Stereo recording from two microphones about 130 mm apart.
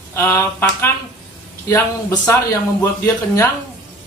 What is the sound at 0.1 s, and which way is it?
Speech, 20° left (ahead or behind).